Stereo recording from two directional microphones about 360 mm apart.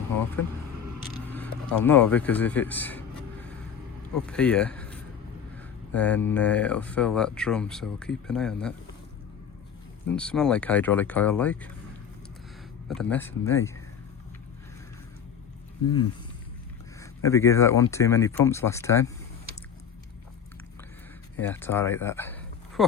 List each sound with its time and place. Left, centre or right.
1.3 s speech: centre
4.1 s speech: centre
10.2 s speech: centre
12.9 s speech: centre
17.2 s speech: centre
21.4 s speech: centre